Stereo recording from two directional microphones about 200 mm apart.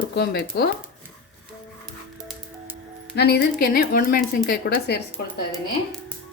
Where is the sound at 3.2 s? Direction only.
55° left (ahead or behind).